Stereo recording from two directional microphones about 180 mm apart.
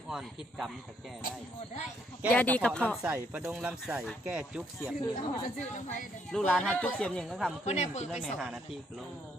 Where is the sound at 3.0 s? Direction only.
10° right (ahead or behind).